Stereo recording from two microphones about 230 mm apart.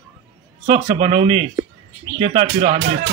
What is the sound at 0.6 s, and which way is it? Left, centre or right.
A man's voice, right.